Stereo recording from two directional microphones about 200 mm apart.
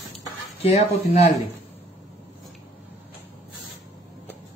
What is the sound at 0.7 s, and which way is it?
Speech, 35° left (ahead or behind).